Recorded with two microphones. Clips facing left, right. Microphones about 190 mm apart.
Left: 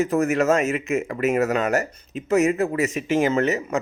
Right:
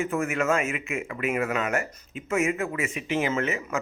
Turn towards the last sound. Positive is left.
turn(degrees=40)  # may be behind; listen again after turning